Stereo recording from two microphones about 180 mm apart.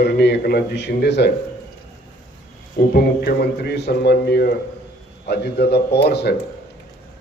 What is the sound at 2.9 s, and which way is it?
A man's voice, 60° left (ahead or behind).